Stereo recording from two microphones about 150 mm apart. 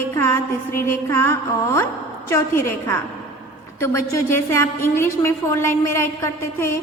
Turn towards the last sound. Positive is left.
turn(degrees=15)  # may be behind; listen again after turning